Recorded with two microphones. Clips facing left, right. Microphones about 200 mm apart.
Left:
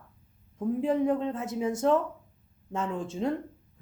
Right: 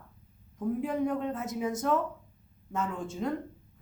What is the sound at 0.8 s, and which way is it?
Speech, 25° left (ahead or behind).